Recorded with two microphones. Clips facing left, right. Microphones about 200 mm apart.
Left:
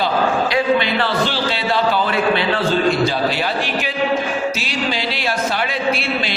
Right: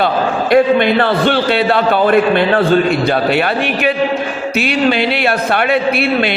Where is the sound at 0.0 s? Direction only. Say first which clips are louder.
Right 3 dB; 55° right (ahead or behind).